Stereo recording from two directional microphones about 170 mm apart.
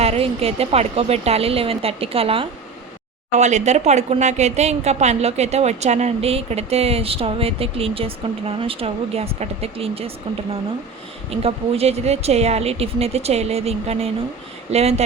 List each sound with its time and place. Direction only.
0.0 s speech: 35° right (ahead or behind)
11.3 s speech: 35° right (ahead or behind)